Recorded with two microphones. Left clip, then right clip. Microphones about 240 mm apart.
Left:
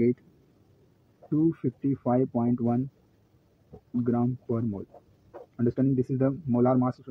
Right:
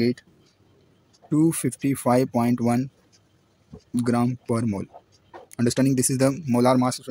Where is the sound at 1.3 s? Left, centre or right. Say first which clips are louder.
Right 4 dB; right.